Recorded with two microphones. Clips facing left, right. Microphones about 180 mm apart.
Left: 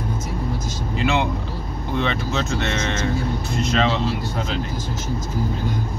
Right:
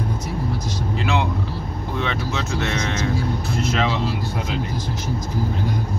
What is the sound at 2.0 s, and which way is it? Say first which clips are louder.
Speech: left 3 dB; centre (ahead or behind).